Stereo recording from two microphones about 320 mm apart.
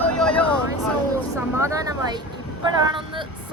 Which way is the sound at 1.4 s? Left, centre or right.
Centre.